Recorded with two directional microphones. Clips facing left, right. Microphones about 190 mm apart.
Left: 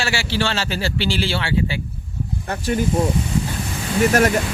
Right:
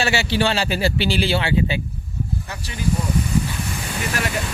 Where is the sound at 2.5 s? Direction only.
50° left (ahead or behind).